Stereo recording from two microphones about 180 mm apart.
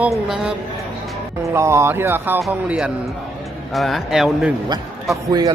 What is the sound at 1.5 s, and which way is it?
A man's voice, 15° right (ahead or behind).